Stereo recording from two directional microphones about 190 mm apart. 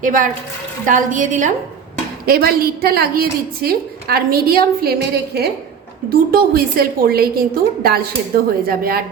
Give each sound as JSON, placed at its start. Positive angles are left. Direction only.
{"t": 0.0, "sound": "a woman's voice", "side_deg": -45}
{"t": 2.2, "sound": "a woman's voice", "side_deg": -55}